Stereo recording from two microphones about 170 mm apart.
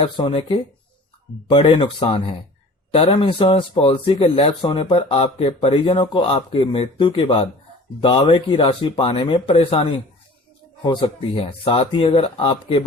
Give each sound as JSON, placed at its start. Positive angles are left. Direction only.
{"t": 0.0, "sound": "speech", "side_deg": 35}
{"t": 10.8, "sound": "speech", "side_deg": 30}